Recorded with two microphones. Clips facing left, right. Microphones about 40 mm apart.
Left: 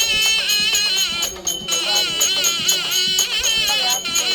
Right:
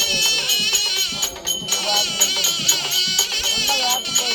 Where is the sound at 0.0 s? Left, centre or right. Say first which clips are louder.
Left 2 dB; left.